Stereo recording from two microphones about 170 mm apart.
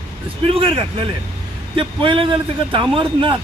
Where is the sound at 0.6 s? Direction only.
30° right (ahead or behind).